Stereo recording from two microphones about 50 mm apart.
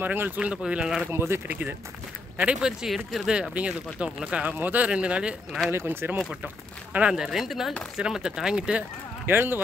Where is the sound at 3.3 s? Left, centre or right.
Right.